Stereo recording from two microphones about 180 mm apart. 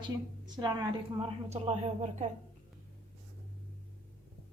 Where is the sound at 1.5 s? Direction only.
40° right (ahead or behind).